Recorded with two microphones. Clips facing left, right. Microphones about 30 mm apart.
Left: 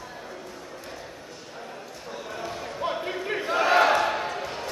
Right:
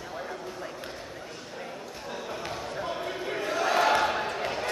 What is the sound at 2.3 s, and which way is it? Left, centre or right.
Basketball bounce, centre.